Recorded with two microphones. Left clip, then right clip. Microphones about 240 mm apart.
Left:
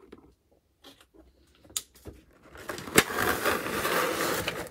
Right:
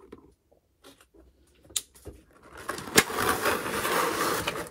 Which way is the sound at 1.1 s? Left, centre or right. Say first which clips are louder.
Even; left.